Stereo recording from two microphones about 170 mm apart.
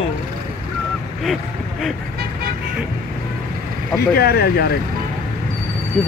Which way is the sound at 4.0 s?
65° left (ahead or behind).